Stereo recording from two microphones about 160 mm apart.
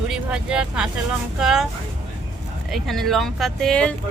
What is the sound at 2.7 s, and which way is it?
Speech, centre (ahead or behind).